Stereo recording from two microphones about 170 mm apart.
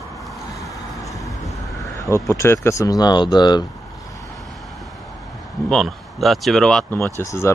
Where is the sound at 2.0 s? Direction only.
15° left (ahead or behind).